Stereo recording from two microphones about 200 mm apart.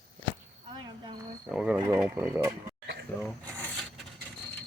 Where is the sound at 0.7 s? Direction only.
20° right (ahead or behind).